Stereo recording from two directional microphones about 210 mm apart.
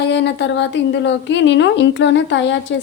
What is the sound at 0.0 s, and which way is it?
A woman's voice, 55° left (ahead or behind).